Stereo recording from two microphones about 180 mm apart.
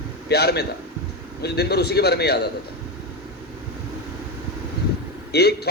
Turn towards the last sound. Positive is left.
turn(degrees=65)  # may be behind; listen again after turning